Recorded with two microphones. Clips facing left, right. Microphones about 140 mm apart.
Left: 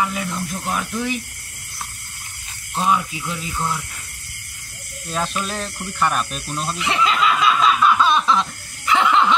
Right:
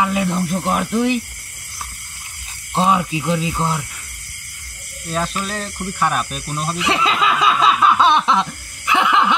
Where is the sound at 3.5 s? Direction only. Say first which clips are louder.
Right 3 dB; 25° right (ahead or behind).